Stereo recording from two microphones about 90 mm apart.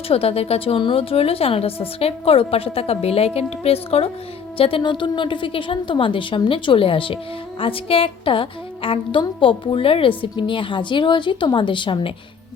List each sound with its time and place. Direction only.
0.1 s a woman's voice: 90° left
4.8 s a woman's voice: 55° left (ahead or behind)